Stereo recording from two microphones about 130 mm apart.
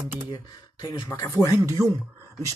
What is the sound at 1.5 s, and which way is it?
Speech, 25° right (ahead or behind).